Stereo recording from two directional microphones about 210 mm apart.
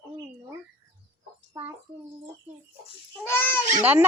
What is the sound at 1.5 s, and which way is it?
Speech, 10° right (ahead or behind).